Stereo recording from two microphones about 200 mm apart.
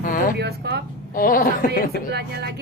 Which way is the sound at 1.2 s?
45° left (ahead or behind).